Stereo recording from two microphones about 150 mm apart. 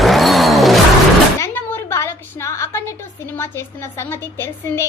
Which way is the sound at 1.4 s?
15° left (ahead or behind).